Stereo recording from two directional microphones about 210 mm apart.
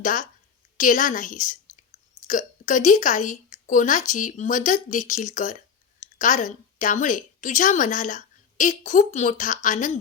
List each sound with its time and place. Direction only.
0.0 s a woman's voice: 40° left (ahead or behind)